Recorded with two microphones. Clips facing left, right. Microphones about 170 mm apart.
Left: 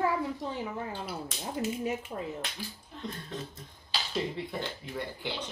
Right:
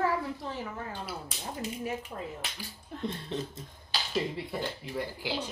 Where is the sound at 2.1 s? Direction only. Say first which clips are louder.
Left 2 dB; 15° left (ahead or behind).